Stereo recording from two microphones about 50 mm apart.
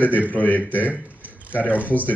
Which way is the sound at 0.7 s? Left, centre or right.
Right.